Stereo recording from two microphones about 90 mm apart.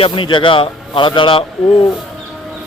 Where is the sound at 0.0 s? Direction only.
65° left (ahead or behind).